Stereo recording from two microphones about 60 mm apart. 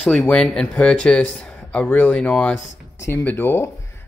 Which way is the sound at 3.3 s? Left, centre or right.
Left.